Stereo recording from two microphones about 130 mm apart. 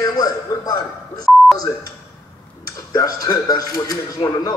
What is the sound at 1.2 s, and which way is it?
Beep, centre (ahead or behind).